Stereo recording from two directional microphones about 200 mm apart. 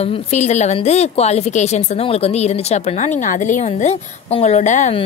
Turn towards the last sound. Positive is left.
turn(degrees=35)  # may be behind; listen again after turning